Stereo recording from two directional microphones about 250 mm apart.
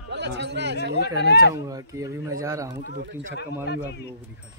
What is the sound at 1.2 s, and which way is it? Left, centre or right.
Speech, left.